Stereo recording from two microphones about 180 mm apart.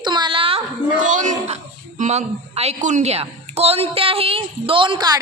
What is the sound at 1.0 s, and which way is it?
A woman's voice, 45° right (ahead or behind).